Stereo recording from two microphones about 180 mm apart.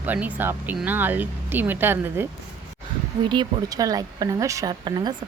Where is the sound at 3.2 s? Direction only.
25° right (ahead or behind).